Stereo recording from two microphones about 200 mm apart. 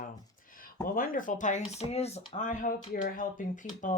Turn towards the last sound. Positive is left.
turn(degrees=40)  # may be behind; listen again after turning